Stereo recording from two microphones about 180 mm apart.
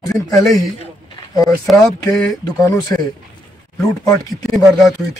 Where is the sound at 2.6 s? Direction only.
20° left (ahead or behind).